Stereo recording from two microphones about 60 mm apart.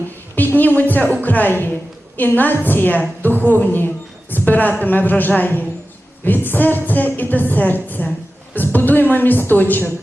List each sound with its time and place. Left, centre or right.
0.3 s a woman's voice: left